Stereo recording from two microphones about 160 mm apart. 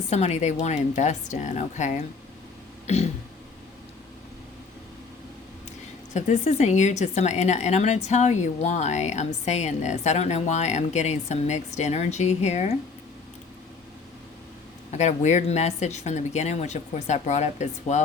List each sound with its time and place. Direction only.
0.1 s speech: 45° left (ahead or behind)
2.8 s throat clearing: 45° left (ahead or behind)
6.1 s speech: 45° left (ahead or behind)
14.9 s speech: 45° left (ahead or behind)